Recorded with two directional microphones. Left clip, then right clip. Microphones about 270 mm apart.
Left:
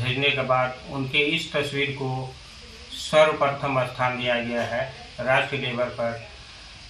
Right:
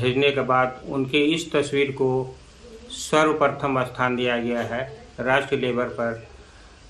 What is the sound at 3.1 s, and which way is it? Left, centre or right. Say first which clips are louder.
Speech: even; centre.